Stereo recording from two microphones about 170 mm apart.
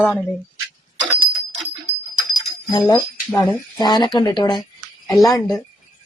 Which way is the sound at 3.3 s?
25° left (ahead or behind).